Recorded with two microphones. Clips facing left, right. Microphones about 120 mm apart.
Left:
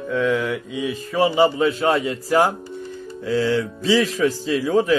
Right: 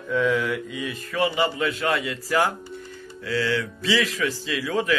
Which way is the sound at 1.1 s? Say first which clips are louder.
Left 6 dB; 35° left (ahead or behind).